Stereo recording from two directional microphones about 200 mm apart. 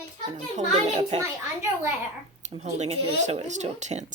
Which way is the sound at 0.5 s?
35° right (ahead or behind).